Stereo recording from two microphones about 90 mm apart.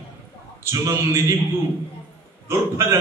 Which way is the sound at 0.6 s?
35° right (ahead or behind).